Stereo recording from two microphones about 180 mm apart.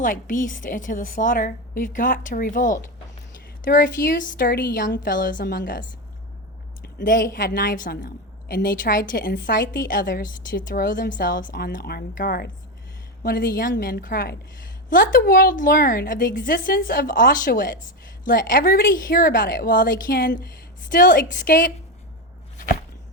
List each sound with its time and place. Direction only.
0.0 s a woman's voice: 50° left (ahead or behind)
6.8 s a woman's voice: 50° left (ahead or behind)
22.5 s a sound: 50° left (ahead or behind)